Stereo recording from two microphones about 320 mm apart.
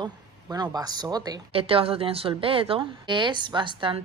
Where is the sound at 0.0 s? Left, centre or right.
Centre.